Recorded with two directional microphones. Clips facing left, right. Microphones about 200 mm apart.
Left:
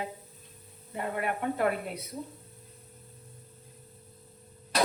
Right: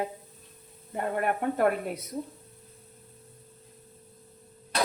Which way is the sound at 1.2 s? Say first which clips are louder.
Right 3 dB; 45° right (ahead or behind).